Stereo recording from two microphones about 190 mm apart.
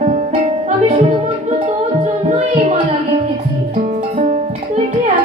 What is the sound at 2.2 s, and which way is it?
Music, 40° right (ahead or behind).